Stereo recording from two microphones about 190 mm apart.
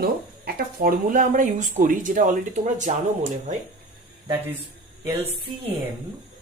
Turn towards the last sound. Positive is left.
turn(degrees=-25)  # may be behind; listen again after turning